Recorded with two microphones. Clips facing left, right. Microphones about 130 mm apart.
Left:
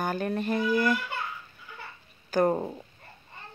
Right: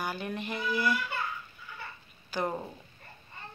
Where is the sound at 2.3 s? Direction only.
45° left (ahead or behind).